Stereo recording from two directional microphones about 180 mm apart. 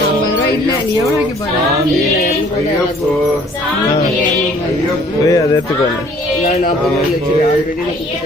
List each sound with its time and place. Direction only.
5.2 s speech: 20° left (ahead or behind)